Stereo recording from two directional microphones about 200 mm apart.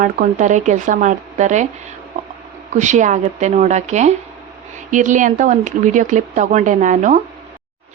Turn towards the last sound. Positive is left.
turn(degrees=-40)  # may be behind; listen again after turning